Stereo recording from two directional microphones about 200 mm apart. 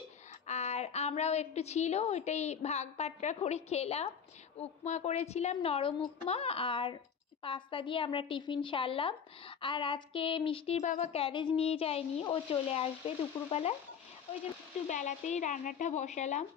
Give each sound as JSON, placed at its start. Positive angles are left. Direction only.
{"t": 0.5, "sound": "a woman's voice", "side_deg": 35}
{"t": 14.9, "sound": "a woman's voice", "side_deg": 35}